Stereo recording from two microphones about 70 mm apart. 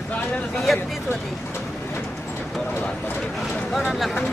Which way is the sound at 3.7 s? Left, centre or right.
Centre.